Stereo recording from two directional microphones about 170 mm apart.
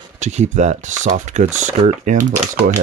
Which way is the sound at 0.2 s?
45° right (ahead or behind).